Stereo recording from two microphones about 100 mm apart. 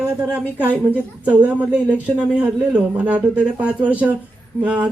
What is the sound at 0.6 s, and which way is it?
A man's voice, 20° right (ahead or behind).